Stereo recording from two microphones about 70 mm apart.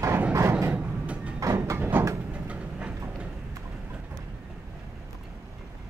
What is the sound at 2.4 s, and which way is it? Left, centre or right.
Train, centre.